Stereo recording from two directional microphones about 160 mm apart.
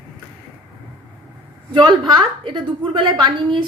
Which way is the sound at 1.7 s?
30° right (ahead or behind).